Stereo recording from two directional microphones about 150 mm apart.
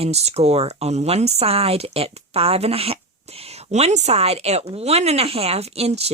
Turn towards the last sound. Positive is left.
turn(degrees=-45)  # may be behind; listen again after turning